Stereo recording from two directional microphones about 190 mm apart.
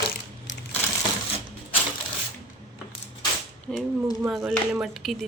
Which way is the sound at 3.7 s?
Centre (ahead or behind).